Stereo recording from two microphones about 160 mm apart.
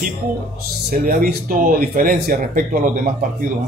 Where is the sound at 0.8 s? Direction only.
70° right (ahead or behind).